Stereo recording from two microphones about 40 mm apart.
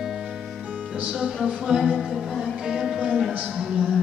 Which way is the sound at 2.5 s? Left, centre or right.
Centre.